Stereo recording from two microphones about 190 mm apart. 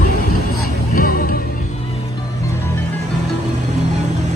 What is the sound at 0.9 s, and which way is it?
Music, 50° left (ahead or behind).